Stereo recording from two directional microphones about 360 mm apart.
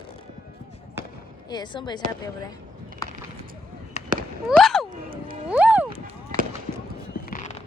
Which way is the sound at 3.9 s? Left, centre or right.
Right.